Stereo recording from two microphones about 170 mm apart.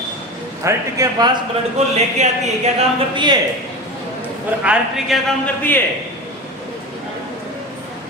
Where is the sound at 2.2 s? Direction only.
40° right (ahead or behind).